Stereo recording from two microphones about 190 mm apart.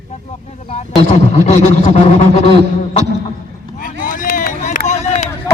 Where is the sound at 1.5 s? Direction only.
35° left (ahead or behind).